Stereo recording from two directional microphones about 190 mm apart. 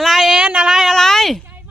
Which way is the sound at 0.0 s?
Centre (ahead or behind).